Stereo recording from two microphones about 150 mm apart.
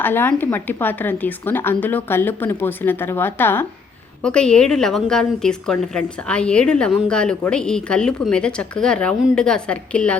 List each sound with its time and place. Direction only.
0.0 s a woman's voice: 15° left (ahead or behind)